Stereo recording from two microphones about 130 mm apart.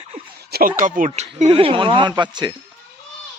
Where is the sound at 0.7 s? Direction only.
90° right; by 1.4 s 75° right (ahead or behind).